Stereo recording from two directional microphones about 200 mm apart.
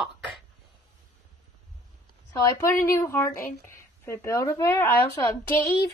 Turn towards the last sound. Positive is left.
turn(degrees=15)  # may be behind; listen again after turning